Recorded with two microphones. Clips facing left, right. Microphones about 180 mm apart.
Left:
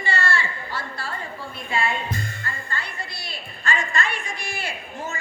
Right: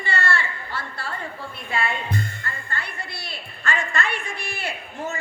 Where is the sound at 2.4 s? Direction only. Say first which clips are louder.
Even; 60° right (ahead or behind).